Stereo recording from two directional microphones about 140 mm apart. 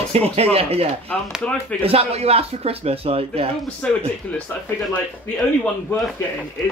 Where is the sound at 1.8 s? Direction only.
45° right (ahead or behind).